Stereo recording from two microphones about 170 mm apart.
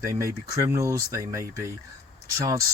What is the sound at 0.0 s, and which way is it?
Speech, 20° right (ahead or behind).